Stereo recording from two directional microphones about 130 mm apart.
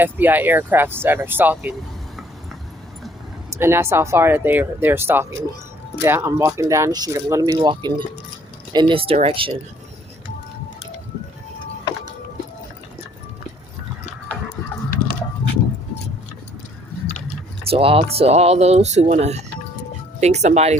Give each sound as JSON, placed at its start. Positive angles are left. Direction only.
{"t": 0.0, "sound": "speech", "side_deg": -15}
{"t": 3.5, "sound": "speech", "side_deg": -20}
{"t": 7.5, "sound": "speech", "side_deg": -35}
{"t": 17.1, "sound": "chewing", "side_deg": 65}
{"t": 17.7, "sound": "speech", "side_deg": -45}